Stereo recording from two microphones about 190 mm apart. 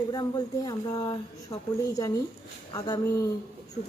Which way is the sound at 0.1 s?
20° left (ahead or behind).